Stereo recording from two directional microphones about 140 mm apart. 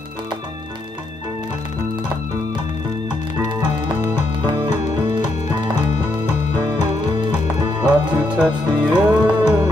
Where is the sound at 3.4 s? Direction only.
30° right (ahead or behind).